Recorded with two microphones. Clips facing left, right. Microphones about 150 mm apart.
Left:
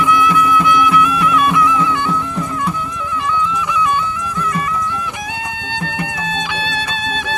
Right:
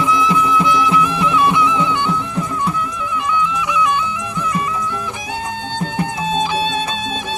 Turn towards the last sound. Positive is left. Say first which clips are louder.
# right 1 dB
turn(degrees=-40)  # may be behind; listen again after turning